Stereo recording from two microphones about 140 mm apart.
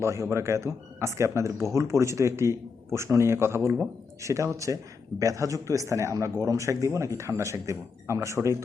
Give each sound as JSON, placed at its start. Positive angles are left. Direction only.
{"t": 0.0, "sound": "speech", "side_deg": -20}